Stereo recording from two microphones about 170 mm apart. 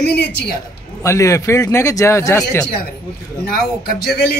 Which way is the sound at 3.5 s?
60° left (ahead or behind).